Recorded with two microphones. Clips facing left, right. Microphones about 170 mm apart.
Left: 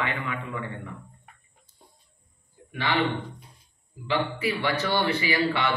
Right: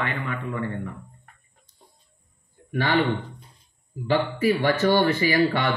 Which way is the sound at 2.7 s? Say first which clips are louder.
Right 5 dB; 40° right (ahead or behind).